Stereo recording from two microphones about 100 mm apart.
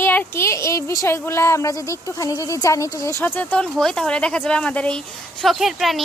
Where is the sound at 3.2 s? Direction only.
20° left (ahead or behind).